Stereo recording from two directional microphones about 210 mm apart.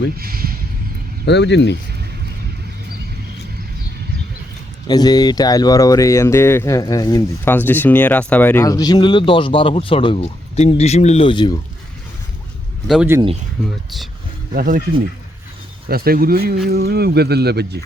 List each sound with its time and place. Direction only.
0.2 s speech: 45° right (ahead or behind)
1.2 s speech: 55° left (ahead or behind)
4.9 s speech: 20° left (ahead or behind)
12.9 s speech: 10° right (ahead or behind)
14.5 s speech: 40° right (ahead or behind)
15.9 s speech: 45° right (ahead or behind)